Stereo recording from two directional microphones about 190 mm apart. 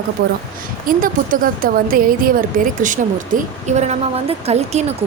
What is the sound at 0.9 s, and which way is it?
A woman's voice, 45° right (ahead or behind).